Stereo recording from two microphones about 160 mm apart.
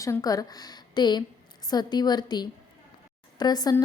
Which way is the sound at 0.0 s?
20° left (ahead or behind).